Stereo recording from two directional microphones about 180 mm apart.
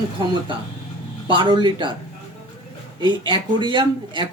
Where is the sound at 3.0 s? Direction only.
25° right (ahead or behind).